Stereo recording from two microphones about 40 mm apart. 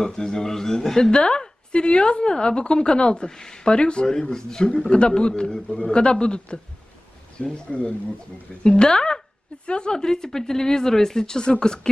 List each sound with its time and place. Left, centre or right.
0.0 s a man's voice: centre